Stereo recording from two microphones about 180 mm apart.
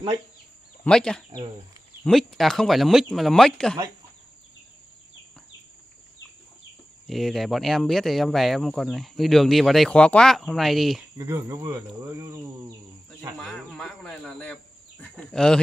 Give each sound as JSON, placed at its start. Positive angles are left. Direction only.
{"t": 0.8, "sound": "speech", "side_deg": 5}
{"t": 7.1, "sound": "speech", "side_deg": 0}
{"t": 11.1, "sound": "speech", "side_deg": -15}
{"t": 13.4, "sound": "speech", "side_deg": 5}